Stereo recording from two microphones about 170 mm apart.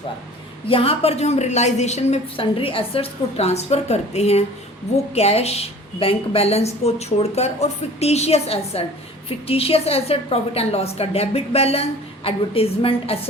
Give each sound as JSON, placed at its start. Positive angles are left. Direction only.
{"t": 0.7, "sound": "a woman's voice", "side_deg": 35}